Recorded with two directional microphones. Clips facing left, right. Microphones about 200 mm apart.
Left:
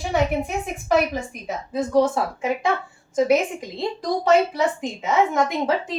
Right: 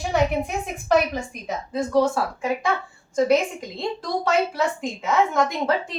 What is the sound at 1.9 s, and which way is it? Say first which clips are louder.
Speech: left 1 dB; 20° left (ahead or behind).